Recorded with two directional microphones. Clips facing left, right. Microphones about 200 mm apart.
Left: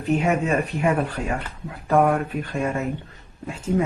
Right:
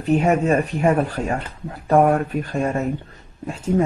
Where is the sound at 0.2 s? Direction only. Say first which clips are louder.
Right 4 dB; 40° right (ahead or behind).